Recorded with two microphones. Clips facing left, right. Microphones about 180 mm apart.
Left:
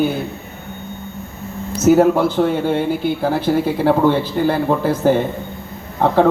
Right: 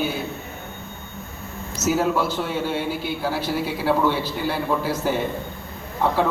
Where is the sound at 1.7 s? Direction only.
55° left (ahead or behind).